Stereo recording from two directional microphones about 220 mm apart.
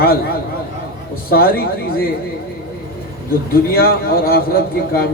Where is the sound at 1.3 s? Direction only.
45° left (ahead or behind).